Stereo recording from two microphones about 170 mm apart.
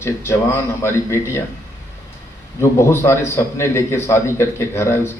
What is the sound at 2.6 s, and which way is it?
A man's voice, 15° left (ahead or behind).